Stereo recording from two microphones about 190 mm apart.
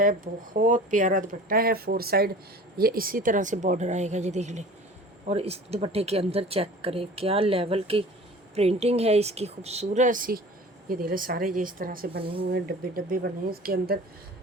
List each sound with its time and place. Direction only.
0.0 s a woman's voice: 45° right (ahead or behind)